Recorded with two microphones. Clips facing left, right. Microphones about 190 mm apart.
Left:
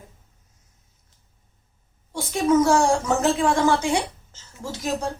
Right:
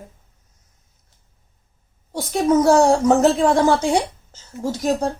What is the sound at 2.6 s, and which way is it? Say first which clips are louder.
Speech: right 5 dB; 40° right (ahead or behind).